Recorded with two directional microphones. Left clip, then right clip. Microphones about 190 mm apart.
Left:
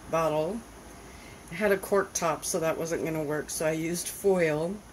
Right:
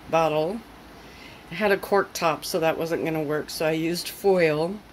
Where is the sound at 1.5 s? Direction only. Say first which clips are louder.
Right 4 dB; 15° right (ahead or behind).